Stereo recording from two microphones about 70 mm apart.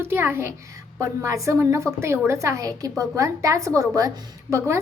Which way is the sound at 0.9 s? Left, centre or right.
Right.